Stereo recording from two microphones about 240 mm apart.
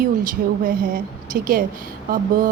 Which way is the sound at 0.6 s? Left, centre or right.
Right.